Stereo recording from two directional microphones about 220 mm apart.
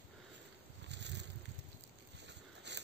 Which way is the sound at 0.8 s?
50° right (ahead or behind).